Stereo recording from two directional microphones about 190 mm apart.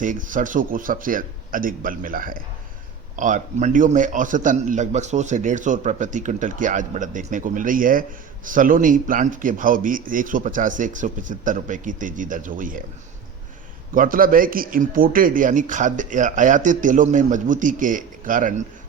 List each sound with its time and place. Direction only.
0.0 s a man's voice: 45° right (ahead or behind)
13.9 s speech: 45° right (ahead or behind)